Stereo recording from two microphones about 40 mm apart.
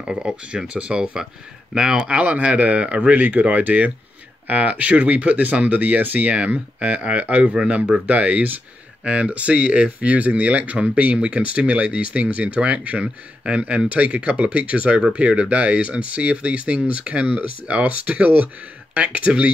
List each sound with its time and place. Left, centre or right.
0.0 s speech: right
1.7 s speech: centre
2.0 s speech: right
6.3 s speech: right